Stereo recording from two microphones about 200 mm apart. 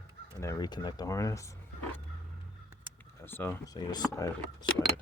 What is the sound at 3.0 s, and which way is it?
Speech, 10° left (ahead or behind).